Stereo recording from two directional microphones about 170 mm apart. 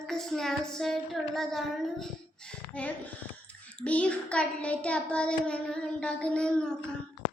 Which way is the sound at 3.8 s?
5° left (ahead or behind).